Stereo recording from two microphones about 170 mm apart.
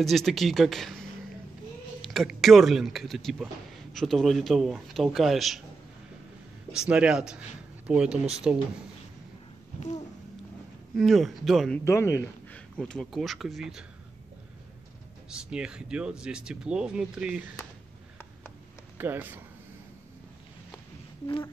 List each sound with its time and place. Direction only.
0.0 s speech: centre (ahead or behind)
6.9 s speech: 5° right (ahead or behind)
11.0 s speech: centre (ahead or behind)
11.8 s speech: 15° left (ahead or behind); by 13.8 s centre (ahead or behind)
15.2 s speech: 5° right (ahead or behind)
18.9 s speech: 10° right (ahead or behind)